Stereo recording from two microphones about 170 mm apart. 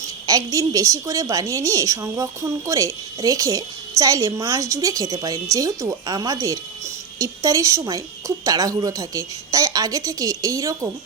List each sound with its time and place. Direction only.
0.3 s a woman's voice: 20° right (ahead or behind)